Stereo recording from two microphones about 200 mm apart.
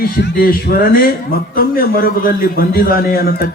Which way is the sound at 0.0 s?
50° left (ahead or behind).